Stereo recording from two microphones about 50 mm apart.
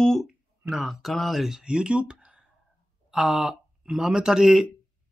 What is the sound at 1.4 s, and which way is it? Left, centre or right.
Speech, centre.